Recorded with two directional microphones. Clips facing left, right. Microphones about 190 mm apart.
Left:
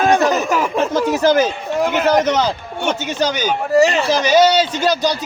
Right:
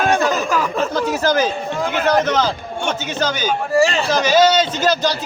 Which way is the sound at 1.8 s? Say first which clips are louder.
Left 3 dB; 15° left (ahead or behind).